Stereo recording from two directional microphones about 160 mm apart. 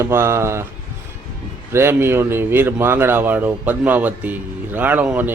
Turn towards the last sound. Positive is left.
turn(degrees=-10)  # may be behind; listen again after turning